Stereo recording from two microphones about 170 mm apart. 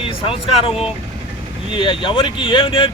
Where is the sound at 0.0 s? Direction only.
35° left (ahead or behind).